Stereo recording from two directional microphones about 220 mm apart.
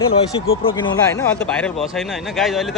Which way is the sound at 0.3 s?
20° left (ahead or behind).